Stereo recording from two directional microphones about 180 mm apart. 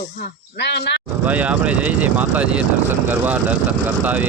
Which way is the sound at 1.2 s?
10° right (ahead or behind).